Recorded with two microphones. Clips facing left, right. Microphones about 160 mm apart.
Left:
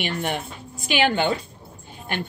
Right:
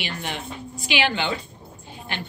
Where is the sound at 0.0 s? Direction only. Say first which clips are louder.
Left 5 dB; 50° left (ahead or behind).